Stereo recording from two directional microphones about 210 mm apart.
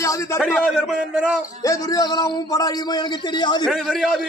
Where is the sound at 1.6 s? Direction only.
15° left (ahead or behind).